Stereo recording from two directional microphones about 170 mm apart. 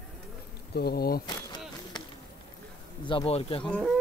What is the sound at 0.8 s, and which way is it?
Speech, 65° left (ahead or behind).